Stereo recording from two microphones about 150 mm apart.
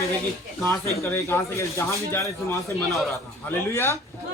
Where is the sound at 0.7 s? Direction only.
20° left (ahead or behind).